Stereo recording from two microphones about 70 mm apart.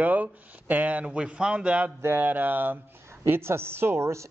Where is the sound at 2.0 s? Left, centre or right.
Right.